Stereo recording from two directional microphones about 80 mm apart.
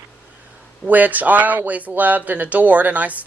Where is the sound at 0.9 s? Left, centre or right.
Right.